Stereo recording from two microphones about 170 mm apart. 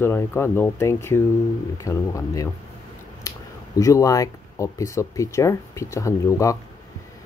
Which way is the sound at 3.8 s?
20° left (ahead or behind).